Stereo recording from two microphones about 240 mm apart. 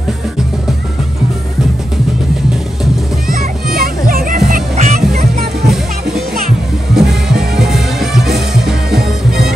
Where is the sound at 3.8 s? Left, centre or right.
Right.